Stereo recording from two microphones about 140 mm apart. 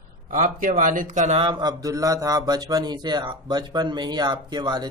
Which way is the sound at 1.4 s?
35° right (ahead or behind).